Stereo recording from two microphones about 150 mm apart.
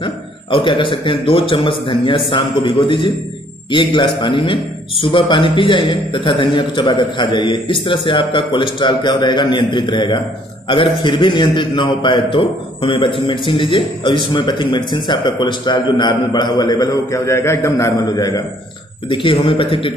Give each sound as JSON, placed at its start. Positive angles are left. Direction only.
{"t": 0.0, "sound": "a man's voice", "side_deg": 35}